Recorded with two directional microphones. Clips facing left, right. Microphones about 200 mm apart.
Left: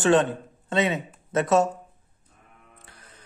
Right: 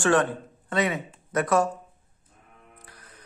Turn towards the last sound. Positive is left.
turn(degrees=25)  # may be behind; listen again after turning